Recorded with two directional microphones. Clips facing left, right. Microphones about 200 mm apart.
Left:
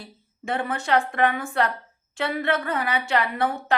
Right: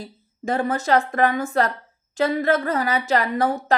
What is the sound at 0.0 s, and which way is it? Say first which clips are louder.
A woman's voice: right 7 dB; 40° right (ahead or behind).